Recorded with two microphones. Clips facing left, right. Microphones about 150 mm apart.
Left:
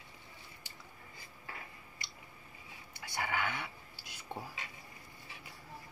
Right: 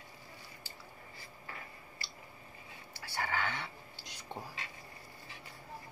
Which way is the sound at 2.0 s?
20° left (ahead or behind).